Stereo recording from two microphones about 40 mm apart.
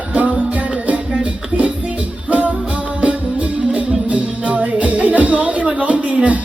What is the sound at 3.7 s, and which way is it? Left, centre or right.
Music, right.